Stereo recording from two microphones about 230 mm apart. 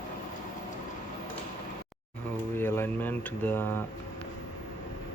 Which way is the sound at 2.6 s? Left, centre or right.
Centre.